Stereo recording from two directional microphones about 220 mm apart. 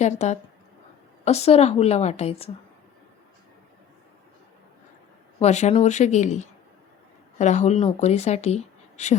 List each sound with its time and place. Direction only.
0.0 s a woman's voice: 30° left (ahead or behind)
5.4 s speech: 30° left (ahead or behind)